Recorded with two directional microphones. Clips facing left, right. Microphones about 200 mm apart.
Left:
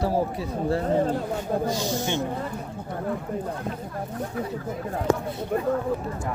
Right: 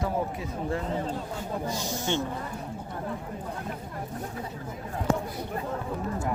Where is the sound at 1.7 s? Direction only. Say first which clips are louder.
Left 6 dB; 90° left.